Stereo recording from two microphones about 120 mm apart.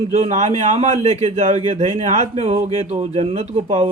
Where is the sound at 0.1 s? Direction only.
75° right (ahead or behind).